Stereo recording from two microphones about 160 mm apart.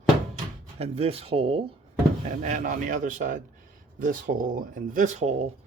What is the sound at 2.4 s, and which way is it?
Speech, 55° right (ahead or behind).